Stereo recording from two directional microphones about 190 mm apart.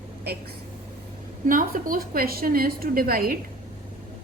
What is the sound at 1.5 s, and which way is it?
A woman's voice, 45° right (ahead or behind).